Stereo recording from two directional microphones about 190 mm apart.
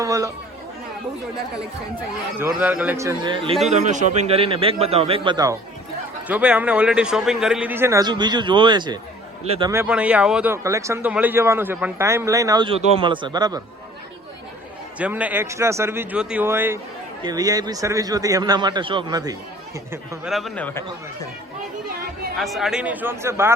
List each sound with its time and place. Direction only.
0.0 s speech: 15° right (ahead or behind)
2.4 s speech: 10° right (ahead or behind); by 3.6 s 25° right (ahead or behind)
3.7 s a man's voice: 40° right (ahead or behind); by 5.5 s 20° right (ahead or behind)
6.2 s a man's voice: 5° right (ahead or behind)
9.8 s speech: 5° right (ahead or behind)
14.9 s a man's voice: 10° right (ahead or behind)
19.9 s speech: centre (ahead or behind)
22.4 s speech: centre (ahead or behind)